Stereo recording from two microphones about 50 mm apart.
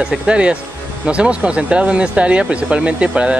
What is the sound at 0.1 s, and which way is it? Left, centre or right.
Speech, right.